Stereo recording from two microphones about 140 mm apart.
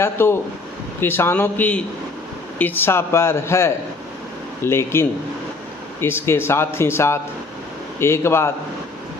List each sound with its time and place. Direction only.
0.0 s a man's voice: 15° left (ahead or behind)